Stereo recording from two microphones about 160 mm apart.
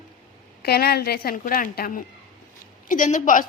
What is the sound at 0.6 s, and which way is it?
A woman's voice, 80° left.